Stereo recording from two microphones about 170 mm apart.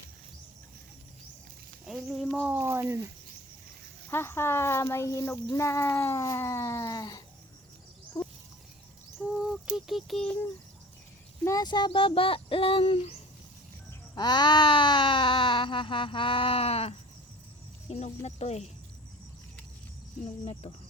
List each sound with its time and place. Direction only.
1.9 s speech: centre (ahead or behind)
4.1 s a child's voice: 15° left (ahead or behind)
8.1 s a sound: 25° left (ahead or behind)
9.1 s a sound: 5° right (ahead or behind)
11.4 s speech: 20° left (ahead or behind)
14.2 s baby cry: 25° left (ahead or behind)
17.8 s speech: 40° left (ahead or behind)
20.2 s speech: 35° left (ahead or behind)